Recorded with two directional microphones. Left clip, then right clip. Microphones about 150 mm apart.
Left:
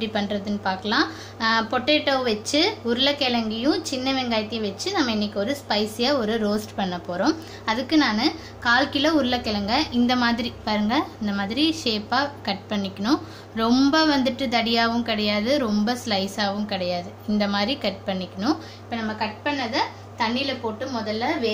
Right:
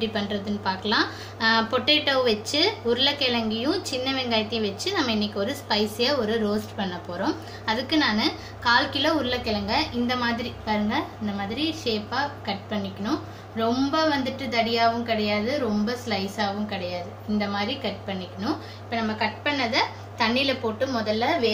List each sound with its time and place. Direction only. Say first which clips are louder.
0.0 s a woman's voice: left 1 dB; 30° left (ahead or behind); by 18.5 s 55° left (ahead or behind)
18.9 s a woman's voice: right 1 dB; 30° left (ahead or behind)
19.4 s a woman's voice: even; 20° left (ahead or behind)